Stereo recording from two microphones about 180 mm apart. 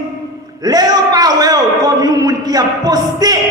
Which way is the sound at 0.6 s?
20° right (ahead or behind).